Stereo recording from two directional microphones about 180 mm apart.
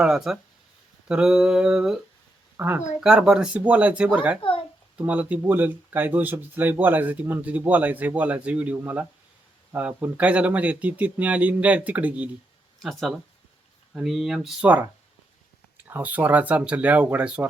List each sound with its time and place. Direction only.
0.0 s a sound: centre (ahead or behind)
2.6 s speech: 10° right (ahead or behind)
4.4 s a child's voice: 30° left (ahead or behind)
4.9 s speech: 10° right (ahead or behind)
12.8 s a sound: centre (ahead or behind)
15.8 s speech: 10° right (ahead or behind)